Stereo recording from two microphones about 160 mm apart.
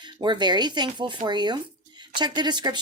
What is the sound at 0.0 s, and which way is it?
Speech, 30° right (ahead or behind).